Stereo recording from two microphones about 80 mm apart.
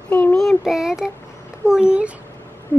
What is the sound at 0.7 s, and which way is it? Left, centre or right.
A woman's voice, centre.